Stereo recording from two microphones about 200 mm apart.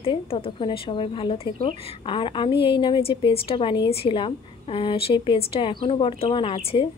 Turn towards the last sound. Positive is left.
turn(degrees=25)  # may be behind; listen again after turning